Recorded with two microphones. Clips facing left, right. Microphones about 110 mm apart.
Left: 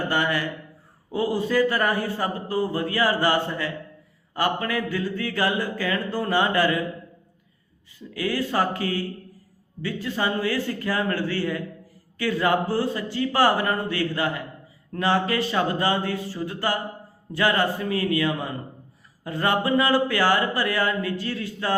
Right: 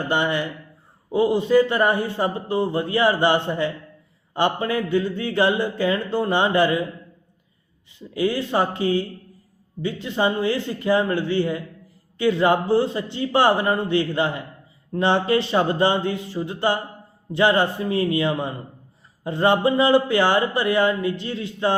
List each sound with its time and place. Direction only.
0.1 s a man's voice: 25° right (ahead or behind)
8.1 s a man's voice: 25° right (ahead or behind)